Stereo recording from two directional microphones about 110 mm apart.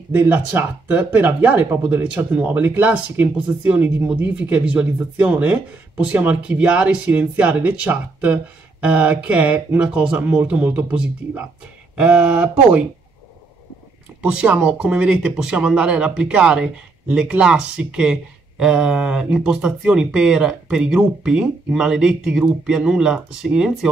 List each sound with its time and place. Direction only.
0.1 s speech: 15° right (ahead or behind)
14.2 s speech: 10° right (ahead or behind)